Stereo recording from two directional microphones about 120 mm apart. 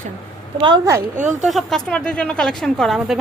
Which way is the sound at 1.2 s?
85° right.